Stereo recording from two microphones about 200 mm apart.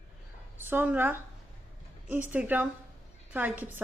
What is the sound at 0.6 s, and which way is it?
A woman's voice, 10° right (ahead or behind).